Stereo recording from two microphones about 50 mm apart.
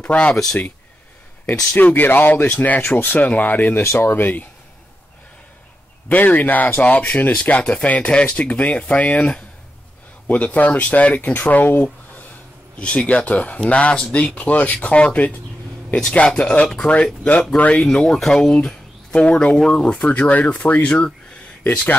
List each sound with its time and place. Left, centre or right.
0.0 s speech: left
2.0 s speech: left
3.8 s speech: left
4.1 s speech: left
6.0 s speech: left
10.2 s speech: left
11.3 s speech: left
12.7 s speech: left
15.9 s speech: centre
17.8 s speech: centre
19.5 s speech: centre